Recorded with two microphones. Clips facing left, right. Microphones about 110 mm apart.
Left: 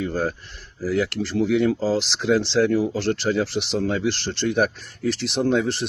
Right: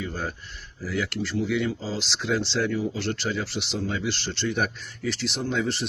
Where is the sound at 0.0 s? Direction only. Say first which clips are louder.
Left 7 dB; 40° left (ahead or behind).